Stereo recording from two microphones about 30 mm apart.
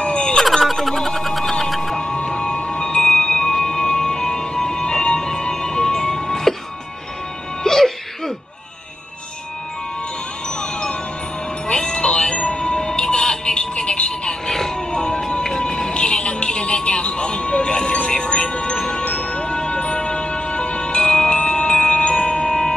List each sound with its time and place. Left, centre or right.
0.0 s a sound: left
0.8 s a sound: centre
2.0 s a sound: left
3.5 s music: left
7.6 s music: centre
10.6 s music: left
14.5 s vehicle: centre
14.9 s music: left
15.9 s music: left
19.0 s music: left